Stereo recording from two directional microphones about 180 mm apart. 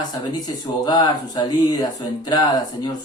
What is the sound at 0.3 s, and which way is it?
Speech, 25° left (ahead or behind).